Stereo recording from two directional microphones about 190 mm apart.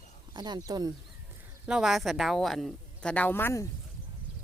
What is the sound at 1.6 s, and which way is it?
Speech, 5° right (ahead or behind).